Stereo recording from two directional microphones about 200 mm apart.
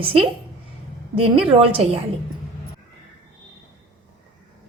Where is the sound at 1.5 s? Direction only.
30° right (ahead or behind).